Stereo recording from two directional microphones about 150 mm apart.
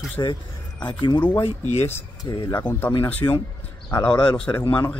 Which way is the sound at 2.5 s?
15° left (ahead or behind).